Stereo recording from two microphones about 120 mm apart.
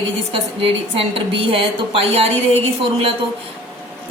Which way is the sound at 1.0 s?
50° right (ahead or behind).